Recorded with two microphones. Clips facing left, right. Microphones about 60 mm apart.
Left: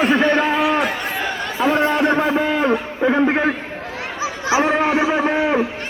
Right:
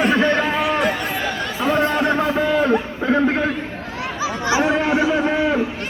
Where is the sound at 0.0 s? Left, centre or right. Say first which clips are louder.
Left 1 dB; left.